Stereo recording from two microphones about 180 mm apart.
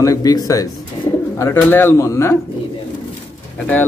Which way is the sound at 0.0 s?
20° left (ahead or behind).